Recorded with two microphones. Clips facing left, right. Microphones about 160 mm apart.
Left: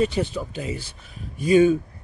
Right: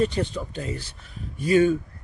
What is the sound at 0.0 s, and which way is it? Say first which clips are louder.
Speech: left 1 dB; 5° left (ahead or behind).